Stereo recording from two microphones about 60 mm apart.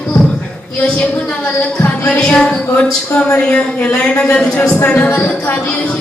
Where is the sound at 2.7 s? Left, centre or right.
Left.